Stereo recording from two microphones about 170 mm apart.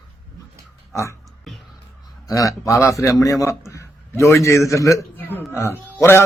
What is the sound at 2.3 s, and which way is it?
A man's voice, 20° left (ahead or behind).